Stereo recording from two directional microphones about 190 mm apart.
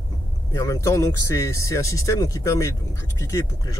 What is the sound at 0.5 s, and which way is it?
Speech, 15° left (ahead or behind).